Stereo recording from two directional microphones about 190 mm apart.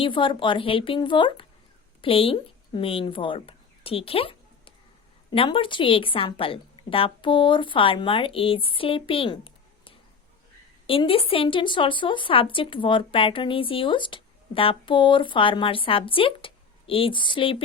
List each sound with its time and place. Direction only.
0.0 s a woman's voice: 25° left (ahead or behind)